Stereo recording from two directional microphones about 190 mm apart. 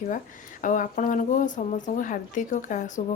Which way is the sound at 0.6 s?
45° left (ahead or behind).